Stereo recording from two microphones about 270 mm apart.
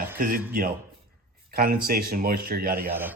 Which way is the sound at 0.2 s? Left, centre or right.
Right.